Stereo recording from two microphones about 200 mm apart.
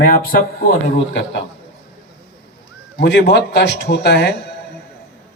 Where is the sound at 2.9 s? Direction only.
60° left (ahead or behind).